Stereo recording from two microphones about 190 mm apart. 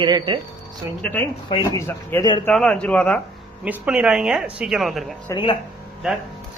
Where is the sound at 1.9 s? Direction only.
10° left (ahead or behind).